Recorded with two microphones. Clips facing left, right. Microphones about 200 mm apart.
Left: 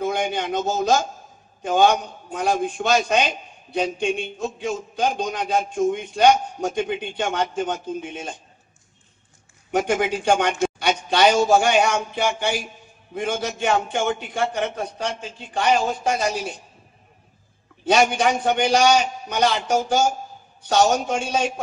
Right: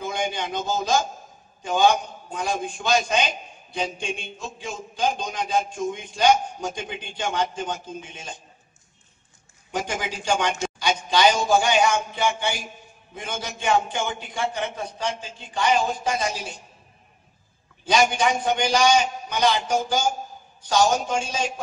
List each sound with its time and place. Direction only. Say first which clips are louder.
0.0 s a man's voice: left 4 dB; 60° left (ahead or behind)
9.7 s a man's voice: left 8 dB; 60° left (ahead or behind)
10.6 s a sound: left 4 dB; 65° left (ahead or behind)
11.6 s a man's voice: left 2 dB; 60° left (ahead or behind)
18.2 s a man's voice: left 3 dB; 65° left (ahead or behind)